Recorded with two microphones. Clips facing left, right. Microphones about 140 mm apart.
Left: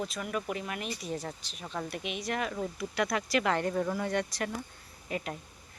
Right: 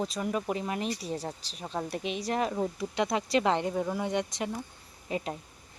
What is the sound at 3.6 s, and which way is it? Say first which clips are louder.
Speech: even; 15° right (ahead or behind).